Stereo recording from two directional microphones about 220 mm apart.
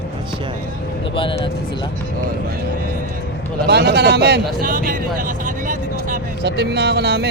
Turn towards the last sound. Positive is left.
turn(degrees=-45)  # may be behind; listen again after turning